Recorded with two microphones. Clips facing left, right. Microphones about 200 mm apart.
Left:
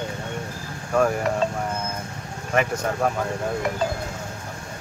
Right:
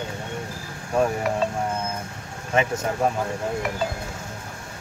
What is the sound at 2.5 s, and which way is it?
Speech, 25° right (ahead or behind).